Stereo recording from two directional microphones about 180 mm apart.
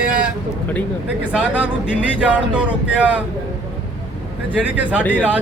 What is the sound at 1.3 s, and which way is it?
Speech, 5° right (ahead or behind).